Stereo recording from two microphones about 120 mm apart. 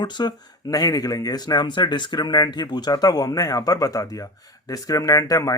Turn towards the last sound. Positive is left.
turn(degrees=30)  # may be behind; listen again after turning